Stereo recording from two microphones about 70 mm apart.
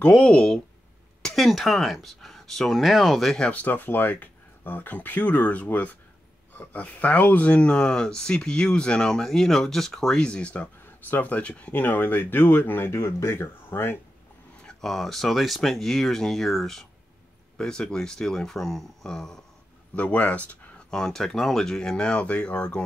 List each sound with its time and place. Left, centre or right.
0.1 s speech: centre
3.4 s speech: left
14.7 s speech: centre
20.0 s speech: left
20.9 s speech: centre